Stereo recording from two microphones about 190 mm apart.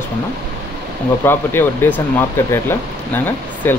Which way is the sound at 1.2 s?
10° left (ahead or behind).